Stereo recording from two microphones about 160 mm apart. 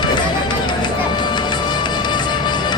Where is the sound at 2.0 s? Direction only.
30° left (ahead or behind).